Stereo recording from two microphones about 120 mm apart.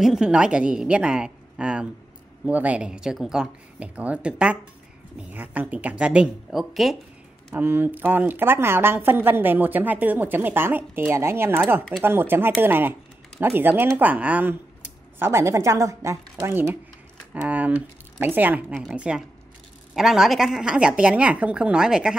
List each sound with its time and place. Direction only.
0.0 s speech: 5° right (ahead or behind)
7.5 s speech: 15° right (ahead or behind)